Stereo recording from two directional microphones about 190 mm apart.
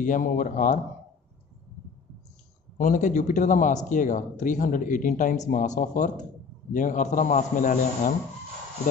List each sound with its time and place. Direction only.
0.0 s speech: 45° left (ahead or behind)
2.8 s speech: 40° left (ahead or behind)